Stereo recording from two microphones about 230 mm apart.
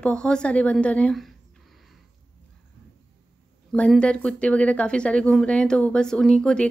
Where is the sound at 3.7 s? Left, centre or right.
Centre.